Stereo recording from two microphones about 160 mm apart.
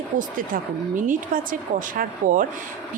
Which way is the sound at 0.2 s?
55° right (ahead or behind).